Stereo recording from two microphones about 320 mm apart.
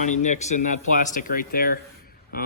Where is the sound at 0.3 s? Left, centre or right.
Left.